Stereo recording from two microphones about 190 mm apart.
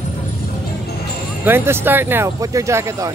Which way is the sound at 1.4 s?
10° right (ahead or behind).